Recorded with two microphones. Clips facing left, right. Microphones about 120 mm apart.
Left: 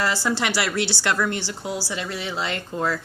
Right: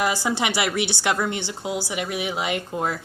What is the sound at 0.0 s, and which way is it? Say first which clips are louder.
Speech: right 1 dB; 15° right (ahead or behind).